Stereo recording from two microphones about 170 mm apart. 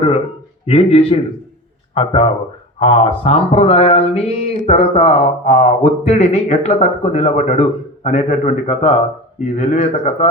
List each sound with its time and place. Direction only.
0.6 s speech: 35° left (ahead or behind)